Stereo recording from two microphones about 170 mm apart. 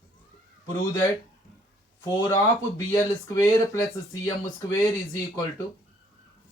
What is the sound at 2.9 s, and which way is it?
Speech, 20° left (ahead or behind).